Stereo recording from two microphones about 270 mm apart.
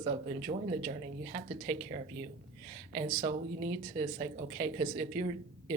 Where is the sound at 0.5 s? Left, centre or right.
Right.